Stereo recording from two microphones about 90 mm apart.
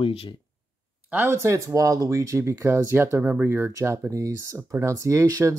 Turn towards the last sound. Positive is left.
turn(degrees=-35)  # may be behind; listen again after turning